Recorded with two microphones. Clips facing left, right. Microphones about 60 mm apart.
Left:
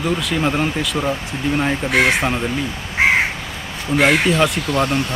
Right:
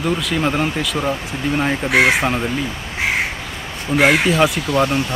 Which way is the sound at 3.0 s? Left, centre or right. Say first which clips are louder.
Left 6 dB; left.